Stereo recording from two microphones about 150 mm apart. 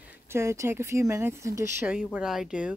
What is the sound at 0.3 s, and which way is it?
Speech, 20° right (ahead or behind).